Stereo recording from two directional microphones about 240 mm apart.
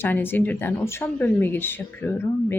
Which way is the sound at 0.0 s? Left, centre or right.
Centre.